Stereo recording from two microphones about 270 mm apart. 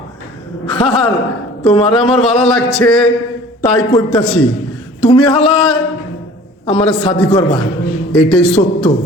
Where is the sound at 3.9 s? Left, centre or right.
Centre.